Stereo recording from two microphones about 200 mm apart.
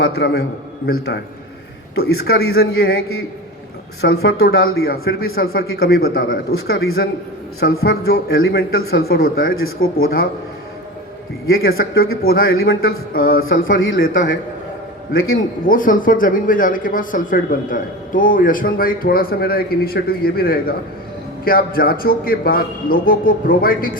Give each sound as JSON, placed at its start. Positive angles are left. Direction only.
{"t": 0.0, "sound": "a man's voice", "side_deg": 55}
{"t": 7.6, "sound": "speech", "side_deg": 50}
{"t": 12.2, "sound": "speech", "side_deg": 50}
{"t": 13.7, "sound": "speech", "side_deg": 70}
{"t": 14.0, "sound": "speech", "side_deg": 45}
{"t": 15.1, "sound": "a man's voice", "side_deg": 80}
{"t": 15.6, "sound": "speech", "side_deg": 45}